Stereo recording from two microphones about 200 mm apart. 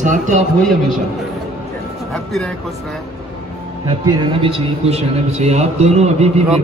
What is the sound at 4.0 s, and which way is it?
A man's voice, 20° right (ahead or behind).